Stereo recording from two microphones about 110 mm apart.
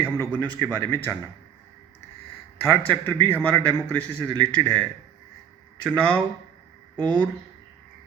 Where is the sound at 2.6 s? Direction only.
20° left (ahead or behind).